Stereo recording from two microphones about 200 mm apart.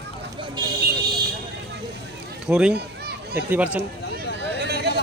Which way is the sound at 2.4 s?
Centre (ahead or behind).